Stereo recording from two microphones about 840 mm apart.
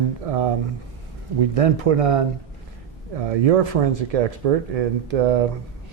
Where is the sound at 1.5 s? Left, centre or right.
Right.